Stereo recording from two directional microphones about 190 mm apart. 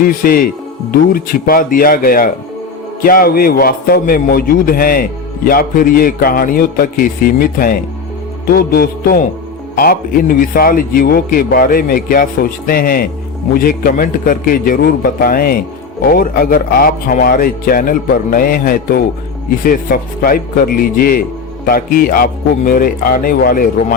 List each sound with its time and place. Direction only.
0.0 s a man's voice: 50° left (ahead or behind)